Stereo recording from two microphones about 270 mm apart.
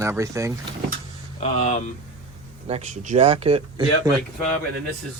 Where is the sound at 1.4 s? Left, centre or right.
Left.